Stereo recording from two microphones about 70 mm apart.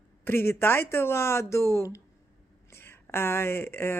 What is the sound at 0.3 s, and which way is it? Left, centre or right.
Speech, left.